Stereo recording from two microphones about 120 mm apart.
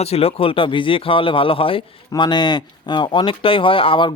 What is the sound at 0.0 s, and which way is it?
A man's voice, 55° left (ahead or behind).